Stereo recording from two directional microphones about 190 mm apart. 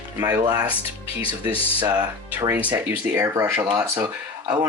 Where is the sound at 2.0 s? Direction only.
20° right (ahead or behind).